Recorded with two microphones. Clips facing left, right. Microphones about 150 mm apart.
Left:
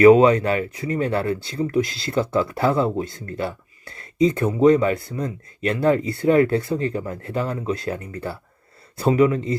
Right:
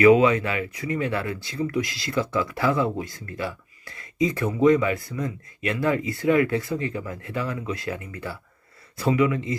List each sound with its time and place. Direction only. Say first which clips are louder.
0.0 s speech: left 4 dB; 35° left (ahead or behind)